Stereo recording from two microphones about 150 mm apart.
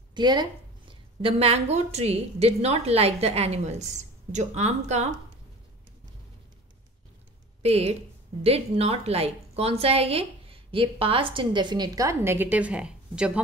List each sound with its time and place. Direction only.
0.1 s a woman's voice: 30° right (ahead or behind); by 5.1 s 50° right (ahead or behind)
7.6 s a woman's voice: 45° right (ahead or behind); by 13.4 s 5° right (ahead or behind)